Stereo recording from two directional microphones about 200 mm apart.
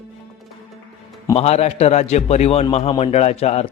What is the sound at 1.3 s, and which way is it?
Speech, 30° left (ahead or behind).